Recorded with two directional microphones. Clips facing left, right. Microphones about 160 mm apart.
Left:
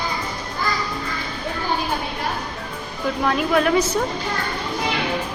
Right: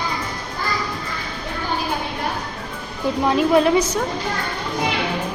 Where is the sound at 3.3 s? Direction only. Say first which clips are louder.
Right 3 dB; 20° right (ahead or behind).